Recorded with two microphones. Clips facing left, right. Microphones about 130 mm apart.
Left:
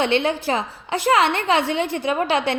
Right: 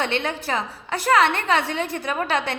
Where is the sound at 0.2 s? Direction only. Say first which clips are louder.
Left 4 dB; 25° left (ahead or behind).